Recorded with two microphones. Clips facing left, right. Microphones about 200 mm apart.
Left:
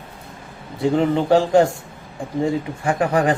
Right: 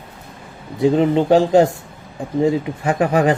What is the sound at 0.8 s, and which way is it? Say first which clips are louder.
Speech: right 3 dB; 20° right (ahead or behind).